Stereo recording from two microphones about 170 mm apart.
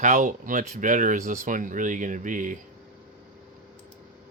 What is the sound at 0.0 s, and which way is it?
Speech, 50° right (ahead or behind).